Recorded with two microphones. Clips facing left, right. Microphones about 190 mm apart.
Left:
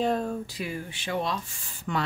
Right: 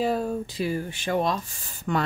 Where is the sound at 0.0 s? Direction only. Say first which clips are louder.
Right 1 dB; 5° right (ahead or behind).